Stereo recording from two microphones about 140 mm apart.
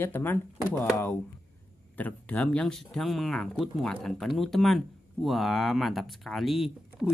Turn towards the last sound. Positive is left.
turn(degrees=-5)  # may be behind; listen again after turning